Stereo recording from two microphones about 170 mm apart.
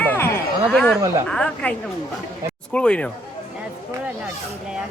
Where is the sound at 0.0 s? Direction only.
15° left (ahead or behind).